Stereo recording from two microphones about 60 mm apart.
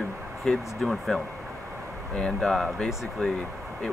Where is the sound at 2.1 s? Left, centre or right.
Centre.